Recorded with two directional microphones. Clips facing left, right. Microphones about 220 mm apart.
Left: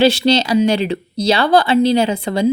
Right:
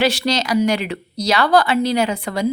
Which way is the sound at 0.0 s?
25° left (ahead or behind).